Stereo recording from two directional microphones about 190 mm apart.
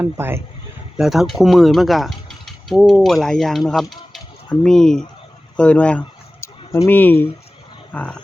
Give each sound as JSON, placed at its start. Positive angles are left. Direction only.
{"t": 0.0, "sound": "speech", "side_deg": -10}
{"t": 0.9, "sound": "mechanisms", "side_deg": 0}
{"t": 3.7, "sound": "speech", "side_deg": 0}